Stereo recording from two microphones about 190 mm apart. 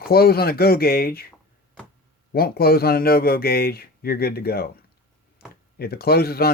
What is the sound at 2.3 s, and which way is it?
A man's voice, 50° left (ahead or behind).